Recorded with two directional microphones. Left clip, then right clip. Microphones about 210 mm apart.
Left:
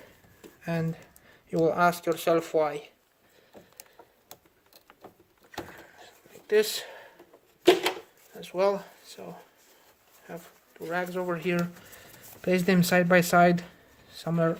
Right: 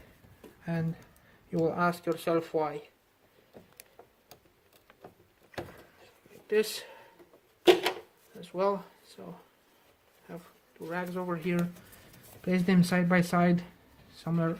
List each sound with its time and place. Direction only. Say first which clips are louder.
0.6 s speech: left 5 dB; 30° left (ahead or behind)
6.5 s speech: left 4 dB; 20° left (ahead or behind)
8.4 s speech: left 4 dB; 20° left (ahead or behind)